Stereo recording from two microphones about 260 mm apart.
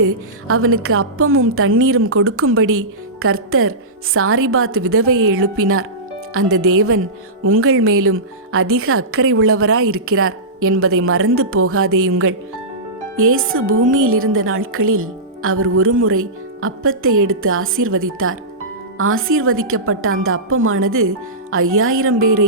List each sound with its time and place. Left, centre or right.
0.0 s a woman's voice: right